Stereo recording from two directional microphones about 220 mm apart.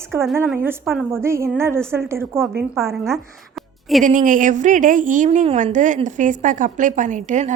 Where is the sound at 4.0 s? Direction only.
35° right (ahead or behind).